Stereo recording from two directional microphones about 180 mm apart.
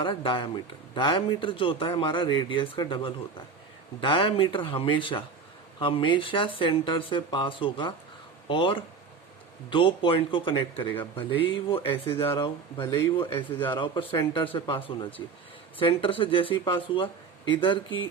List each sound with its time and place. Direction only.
0.0 s speech: 30° left (ahead or behind)